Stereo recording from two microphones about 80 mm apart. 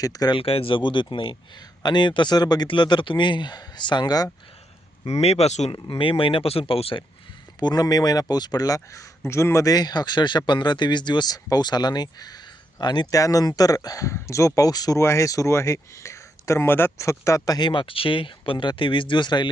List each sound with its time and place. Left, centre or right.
0.0 s speech: left
0.3 s speech: left
1.8 s speech: left
5.7 s speech: left
7.6 s speech: left
9.6 s speech: left
13.1 s speech: left
14.9 s speech: left
17.0 s speech: left
17.7 s speech: left